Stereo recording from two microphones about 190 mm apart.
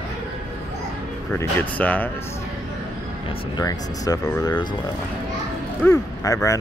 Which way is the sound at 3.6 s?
20° left (ahead or behind).